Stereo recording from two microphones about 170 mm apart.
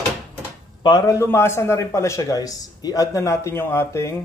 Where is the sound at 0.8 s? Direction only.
25° left (ahead or behind).